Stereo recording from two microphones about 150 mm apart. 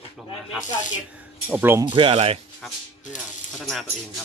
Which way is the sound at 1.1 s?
10° right (ahead or behind).